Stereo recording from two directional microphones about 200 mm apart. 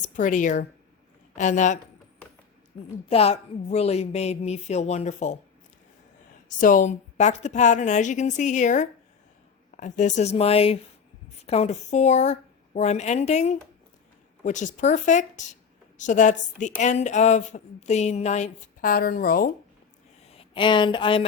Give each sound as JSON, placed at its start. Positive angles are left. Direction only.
{"t": 0.0, "sound": "a woman's voice", "side_deg": 40}
{"t": 3.1, "sound": "a woman's voice", "side_deg": 30}
{"t": 6.6, "sound": "a woman's voice", "side_deg": 40}
{"t": 20.2, "sound": "speech", "side_deg": 30}